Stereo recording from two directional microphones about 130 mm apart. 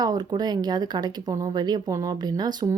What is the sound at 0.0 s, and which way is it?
Speech, 30° right (ahead or behind).